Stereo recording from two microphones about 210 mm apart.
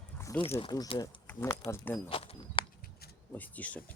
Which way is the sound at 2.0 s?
25° left (ahead or behind).